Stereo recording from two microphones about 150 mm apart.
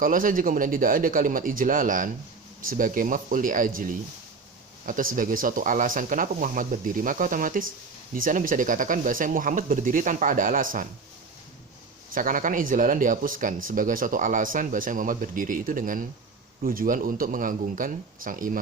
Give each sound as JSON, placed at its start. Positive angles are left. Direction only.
{"t": 0.0, "sound": "speech", "side_deg": -65}
{"t": 12.1, "sound": "speech", "side_deg": -65}